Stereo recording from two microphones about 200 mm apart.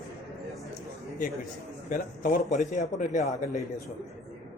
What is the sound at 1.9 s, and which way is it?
A man's voice, 45° left (ahead or behind).